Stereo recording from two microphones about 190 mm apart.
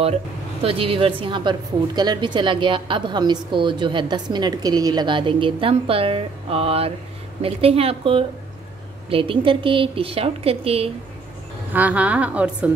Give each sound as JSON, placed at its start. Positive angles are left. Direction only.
{"t": 0.6, "sound": "a woman's voice", "side_deg": -30}
{"t": 11.7, "sound": "a woman's voice", "side_deg": -10}